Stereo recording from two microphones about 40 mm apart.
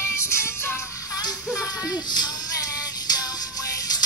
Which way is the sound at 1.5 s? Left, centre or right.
Right.